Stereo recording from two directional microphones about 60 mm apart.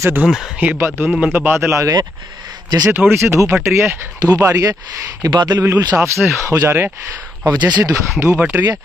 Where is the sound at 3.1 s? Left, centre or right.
Right.